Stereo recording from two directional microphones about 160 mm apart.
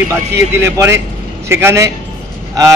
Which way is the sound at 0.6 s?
15° right (ahead or behind).